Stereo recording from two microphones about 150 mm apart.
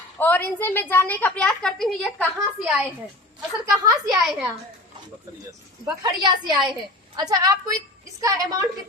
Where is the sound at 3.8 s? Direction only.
25° right (ahead or behind).